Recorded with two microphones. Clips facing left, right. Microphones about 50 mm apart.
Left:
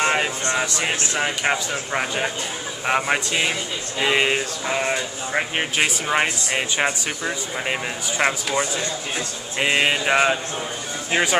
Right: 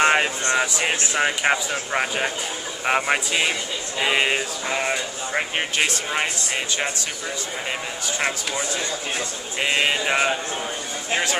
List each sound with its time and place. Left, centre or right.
0.0 s speech: centre
6.0 s speech: centre
9.6 s a sound: centre
11.1 s speech: centre